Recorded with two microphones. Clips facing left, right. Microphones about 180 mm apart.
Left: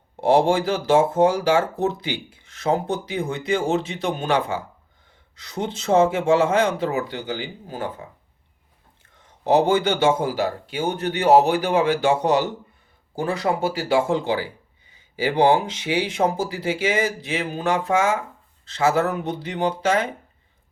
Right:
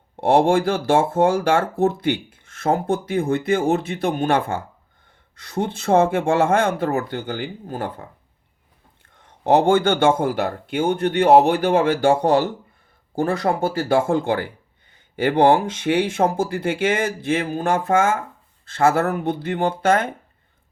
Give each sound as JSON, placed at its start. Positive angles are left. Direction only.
{"t": 0.4, "sound": "speech", "side_deg": -55}
{"t": 9.5, "sound": "speech", "side_deg": -55}